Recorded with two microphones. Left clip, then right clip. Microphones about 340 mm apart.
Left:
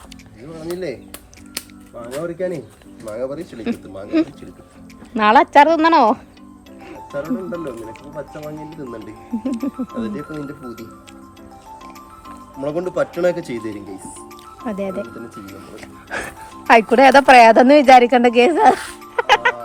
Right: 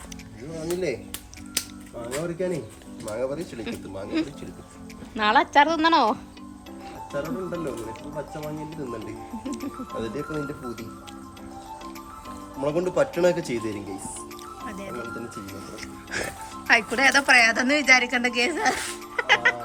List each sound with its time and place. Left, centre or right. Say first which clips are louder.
0.5 s speech: left 2 dB; centre
2.0 s speech: left 5 dB; centre
5.1 s speech: left 8 dB; centre
7.1 s speech: left 5 dB; centre
12.5 s speech: left 3 dB; centre
14.7 s speech: left 15 dB; centre
15.0 s speech: left 1 dB; centre
16.0 s speech: left 4 dB; centre